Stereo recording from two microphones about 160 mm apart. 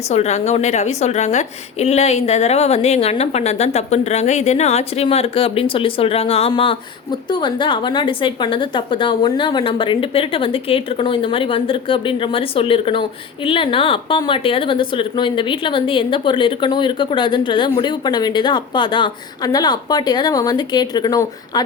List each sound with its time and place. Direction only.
0.1 s a woman's voice: 45° left (ahead or behind); by 21.6 s 25° left (ahead or behind)